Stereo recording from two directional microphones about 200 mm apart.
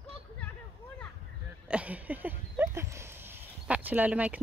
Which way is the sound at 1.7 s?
5° right (ahead or behind).